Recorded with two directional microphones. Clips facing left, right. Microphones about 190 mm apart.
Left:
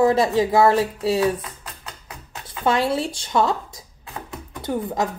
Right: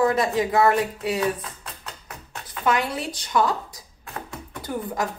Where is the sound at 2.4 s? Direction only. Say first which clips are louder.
Left 3 dB; 30° left (ahead or behind).